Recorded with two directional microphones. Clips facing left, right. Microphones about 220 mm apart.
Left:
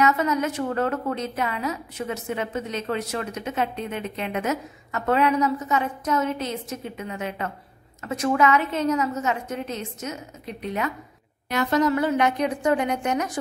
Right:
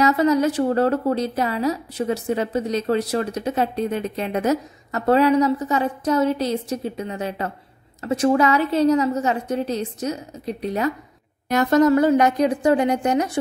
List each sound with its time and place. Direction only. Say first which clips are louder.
0.0 s a woman's voice: right 5 dB; 35° right (ahead or behind)